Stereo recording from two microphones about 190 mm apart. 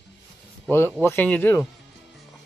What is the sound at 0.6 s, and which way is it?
Speech, 10° left (ahead or behind).